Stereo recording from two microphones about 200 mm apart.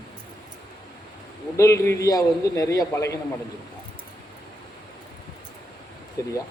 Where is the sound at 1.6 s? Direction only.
15° left (ahead or behind).